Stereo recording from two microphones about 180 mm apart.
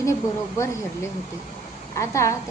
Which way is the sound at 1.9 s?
15° left (ahead or behind).